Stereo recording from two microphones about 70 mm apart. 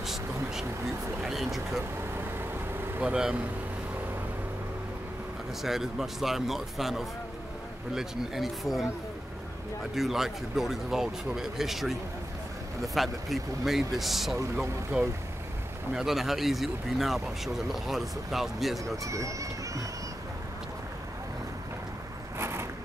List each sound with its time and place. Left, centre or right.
0.0 s vehicle: centre
1.2 s speech: centre
3.0 s speech: centre
5.6 s speech: centre
9.9 s speech: centre
19.0 s speech: right
22.4 s a sound: right